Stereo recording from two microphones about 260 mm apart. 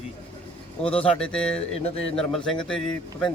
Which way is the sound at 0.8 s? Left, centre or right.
Left.